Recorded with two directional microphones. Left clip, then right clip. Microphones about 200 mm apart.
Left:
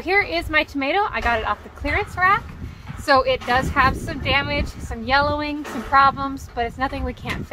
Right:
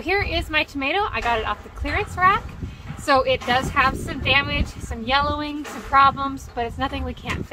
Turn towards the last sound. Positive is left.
turn(degrees=20)  # may be behind; listen again after turning